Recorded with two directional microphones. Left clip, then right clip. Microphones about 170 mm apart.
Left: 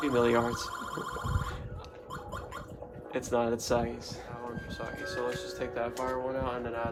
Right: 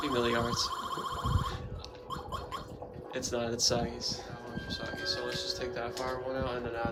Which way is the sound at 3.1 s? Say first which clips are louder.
Left 5 dB; 35° left (ahead or behind).